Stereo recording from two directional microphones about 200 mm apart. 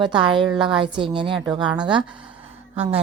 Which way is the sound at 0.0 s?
25° right (ahead or behind).